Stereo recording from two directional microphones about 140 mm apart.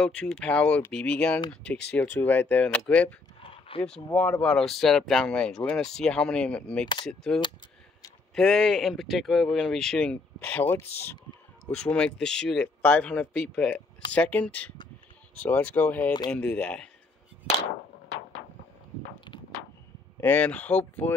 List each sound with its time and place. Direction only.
0.0 s speech: 5° left (ahead or behind)
3.4 s a sound: 40° left (ahead or behind)
3.8 s speech: 5° left (ahead or behind)
20.2 s speech: 15° left (ahead or behind)